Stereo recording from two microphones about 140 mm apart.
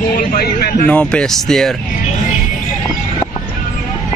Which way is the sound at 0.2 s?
90° left.